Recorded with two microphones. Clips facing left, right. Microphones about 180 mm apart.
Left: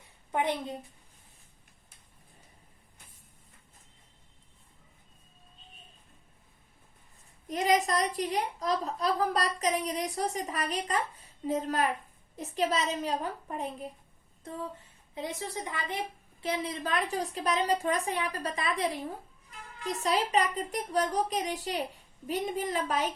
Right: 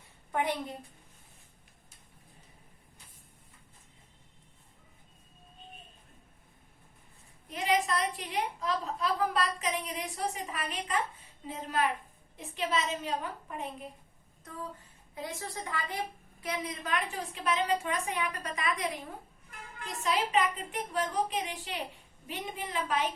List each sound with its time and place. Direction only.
0.3 s a woman's voice: 20° left (ahead or behind)
7.4 s a woman's voice: 40° left (ahead or behind)
15.1 s a woman's voice: 20° left (ahead or behind); by 23.1 s 40° left (ahead or behind)